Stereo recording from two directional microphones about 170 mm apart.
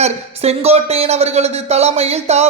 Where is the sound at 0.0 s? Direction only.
40° right (ahead or behind).